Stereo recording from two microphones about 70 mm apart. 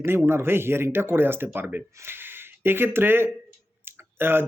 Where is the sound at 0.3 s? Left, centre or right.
Right.